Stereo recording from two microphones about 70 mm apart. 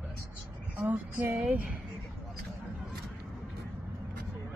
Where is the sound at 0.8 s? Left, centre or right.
Right.